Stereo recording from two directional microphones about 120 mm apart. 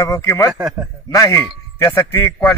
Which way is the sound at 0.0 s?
25° left (ahead or behind).